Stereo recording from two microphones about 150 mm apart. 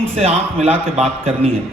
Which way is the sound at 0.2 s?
45° right (ahead or behind).